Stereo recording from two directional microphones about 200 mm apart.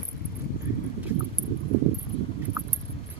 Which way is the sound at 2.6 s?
15° right (ahead or behind).